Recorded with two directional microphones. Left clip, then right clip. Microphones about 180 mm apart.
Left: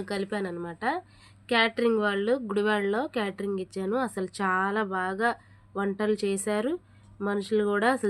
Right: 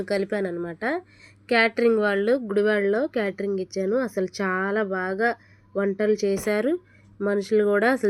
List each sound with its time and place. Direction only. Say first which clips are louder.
0.0 s a woman's voice: right 6 dB; 15° right (ahead or behind)